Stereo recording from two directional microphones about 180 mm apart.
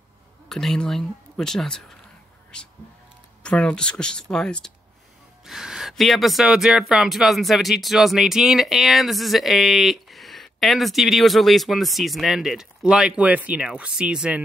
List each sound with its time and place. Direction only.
0.5 s speech: centre (ahead or behind)